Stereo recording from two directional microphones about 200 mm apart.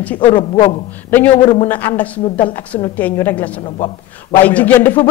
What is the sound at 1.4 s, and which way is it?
Speech, 25° left (ahead or behind).